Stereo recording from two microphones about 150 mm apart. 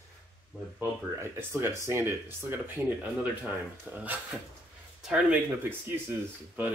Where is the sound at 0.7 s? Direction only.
15° right (ahead or behind).